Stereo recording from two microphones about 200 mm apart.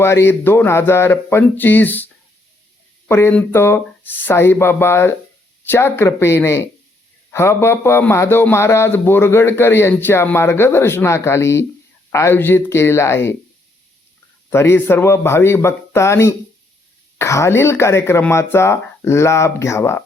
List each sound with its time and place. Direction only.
0.0 s a man's voice: 10° left (ahead or behind)
3.1 s a man's voice: 10° left (ahead or behind)
14.5 s a man's voice: 10° left (ahead or behind)